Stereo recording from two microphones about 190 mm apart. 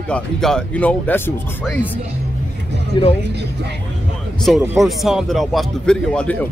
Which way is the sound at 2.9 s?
25° left (ahead or behind).